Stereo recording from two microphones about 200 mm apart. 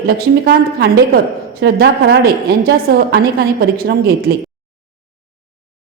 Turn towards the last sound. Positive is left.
turn(degrees=-50)  # may be behind; listen again after turning